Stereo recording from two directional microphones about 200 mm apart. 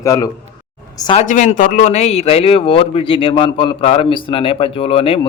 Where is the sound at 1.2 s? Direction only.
40° left (ahead or behind).